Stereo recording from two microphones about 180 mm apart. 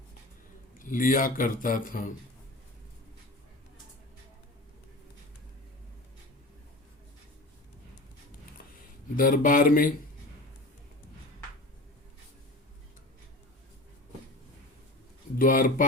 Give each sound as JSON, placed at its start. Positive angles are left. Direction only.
{"t": 0.8, "sound": "speech", "side_deg": 50}
{"t": 9.1, "sound": "speech", "side_deg": 50}
{"t": 15.4, "sound": "speech", "side_deg": 50}